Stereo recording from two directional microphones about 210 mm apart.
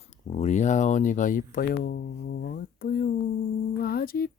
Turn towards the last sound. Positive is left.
turn(degrees=45)  # may be behind; listen again after turning